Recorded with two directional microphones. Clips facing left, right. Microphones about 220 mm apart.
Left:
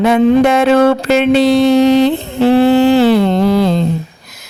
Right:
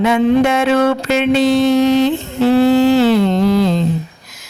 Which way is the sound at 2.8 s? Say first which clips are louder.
Left 2 dB; 60° left (ahead or behind).